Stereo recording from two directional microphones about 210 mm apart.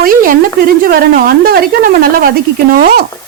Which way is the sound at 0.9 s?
45° right (ahead or behind).